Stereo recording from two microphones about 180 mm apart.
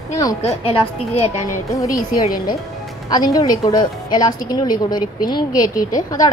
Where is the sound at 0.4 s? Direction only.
35° left (ahead or behind).